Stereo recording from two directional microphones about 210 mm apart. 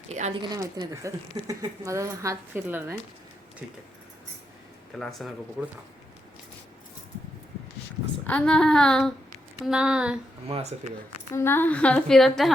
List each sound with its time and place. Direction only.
0.1 s a sound: 35° right (ahead or behind)
0.4 s speech: 20° right (ahead or behind)
4.9 s a woman's voice: centre (ahead or behind)
8.3 s a woman's voice: 5° left (ahead or behind)
10.5 s speech: 30° right (ahead or behind)
11.3 s a woman's voice: 10° left (ahead or behind)